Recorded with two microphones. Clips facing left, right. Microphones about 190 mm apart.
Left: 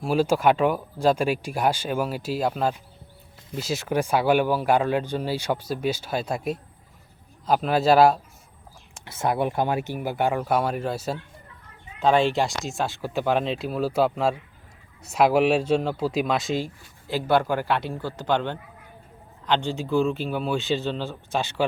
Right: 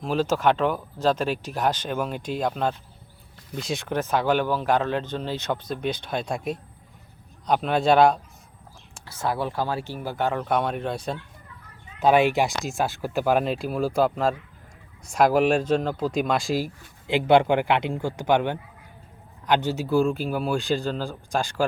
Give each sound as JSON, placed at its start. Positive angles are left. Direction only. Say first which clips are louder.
{"t": 0.0, "sound": "speech", "louder": "left 2 dB", "side_deg": 10}
{"t": 9.0, "sound": "speech", "louder": "left 3 dB", "side_deg": 20}
{"t": 12.0, "sound": "a man's voice", "louder": "right 1 dB", "side_deg": -15}
{"t": 12.5, "sound": "speech", "louder": "right 2 dB", "side_deg": 0}
{"t": 17.1, "sound": "a man's voice", "louder": "right 4 dB", "side_deg": -20}